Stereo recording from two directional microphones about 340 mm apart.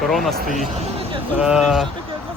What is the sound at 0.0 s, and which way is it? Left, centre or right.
Speech, centre.